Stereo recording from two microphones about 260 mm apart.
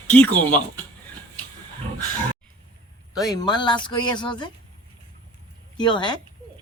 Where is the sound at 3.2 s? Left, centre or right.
Centre.